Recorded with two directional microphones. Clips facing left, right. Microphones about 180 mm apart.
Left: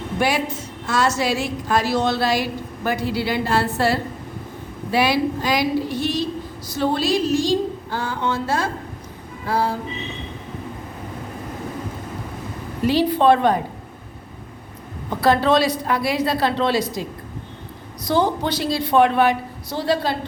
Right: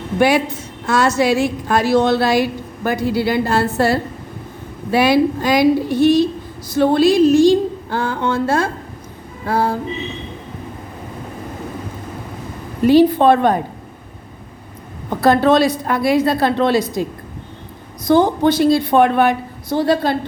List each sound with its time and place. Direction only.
0.2 s a woman's voice: 55° right (ahead or behind)
12.8 s a woman's voice: 50° right (ahead or behind)
15.2 s a woman's voice: 50° right (ahead or behind)
18.1 s a woman's voice: 50° right (ahead or behind)